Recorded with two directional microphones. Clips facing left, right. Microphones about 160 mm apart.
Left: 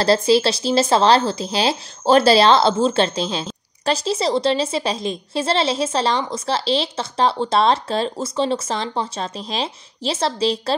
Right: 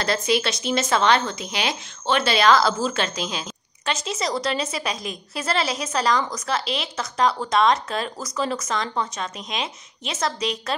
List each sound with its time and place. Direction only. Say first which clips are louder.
0.0 s speech: left 7 dB; 30° left (ahead or behind)